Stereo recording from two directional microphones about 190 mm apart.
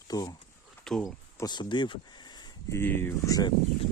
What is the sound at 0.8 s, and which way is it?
Speech, centre (ahead or behind).